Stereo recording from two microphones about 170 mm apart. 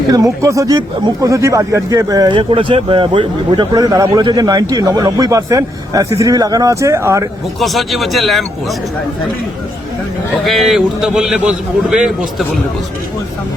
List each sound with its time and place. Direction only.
0.1 s speech: 20° right (ahead or behind)
7.6 s a man's voice: centre (ahead or behind)
10.4 s a man's voice: centre (ahead or behind)